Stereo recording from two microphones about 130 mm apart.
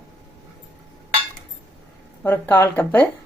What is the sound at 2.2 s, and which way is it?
Speech, 15° left (ahead or behind).